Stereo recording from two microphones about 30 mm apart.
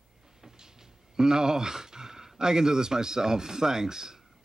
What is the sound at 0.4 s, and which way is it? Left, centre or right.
Speech, centre.